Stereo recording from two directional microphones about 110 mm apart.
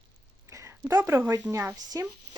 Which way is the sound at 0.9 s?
25° right (ahead or behind).